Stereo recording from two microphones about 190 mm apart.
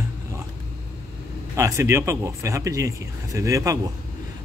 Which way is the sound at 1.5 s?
15° right (ahead or behind).